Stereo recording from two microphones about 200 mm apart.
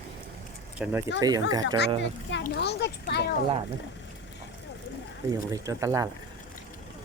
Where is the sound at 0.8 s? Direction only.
5° right (ahead or behind).